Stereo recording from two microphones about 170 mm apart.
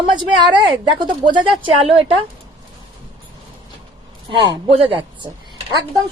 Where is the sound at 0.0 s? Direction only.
30° right (ahead or behind).